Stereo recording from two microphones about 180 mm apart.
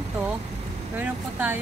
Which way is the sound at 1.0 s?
10° right (ahead or behind).